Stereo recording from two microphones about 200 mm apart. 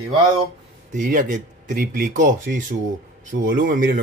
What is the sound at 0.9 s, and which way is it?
Speech, 40° right (ahead or behind).